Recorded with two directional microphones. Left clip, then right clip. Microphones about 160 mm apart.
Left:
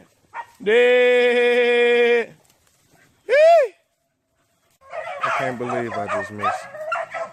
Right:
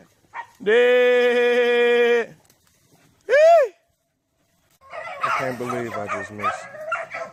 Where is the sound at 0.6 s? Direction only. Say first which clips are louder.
Left 1 dB; 30° left (ahead or behind).